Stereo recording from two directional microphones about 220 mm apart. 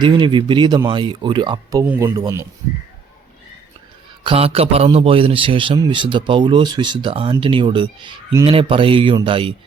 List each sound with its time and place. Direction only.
0.0 s a man's voice: 20° right (ahead or behind)
1.8 s speech: 10° right (ahead or behind)
4.2 s a man's voice: 25° right (ahead or behind)